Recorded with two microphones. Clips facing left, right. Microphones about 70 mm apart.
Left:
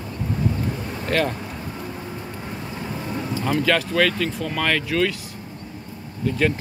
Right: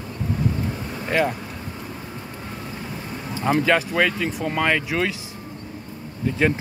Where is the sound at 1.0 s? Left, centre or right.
Centre.